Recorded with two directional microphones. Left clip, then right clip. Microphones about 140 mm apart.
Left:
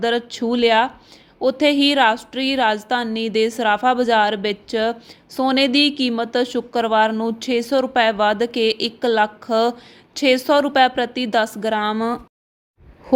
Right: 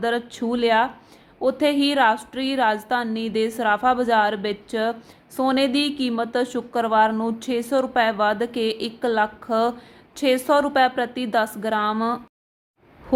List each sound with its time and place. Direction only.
0.0 s a woman's voice: 40° left (ahead or behind)